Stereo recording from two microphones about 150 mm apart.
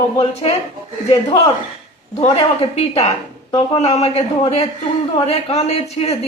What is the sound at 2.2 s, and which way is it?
Speech, 40° left (ahead or behind).